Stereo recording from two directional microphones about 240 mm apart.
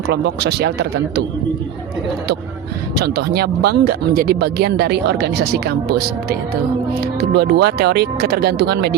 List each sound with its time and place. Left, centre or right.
0.1 s speech: right
2.9 s speech: right